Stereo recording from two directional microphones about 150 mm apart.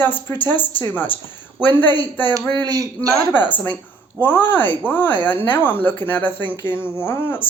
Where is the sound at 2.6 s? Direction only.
25° right (ahead or behind).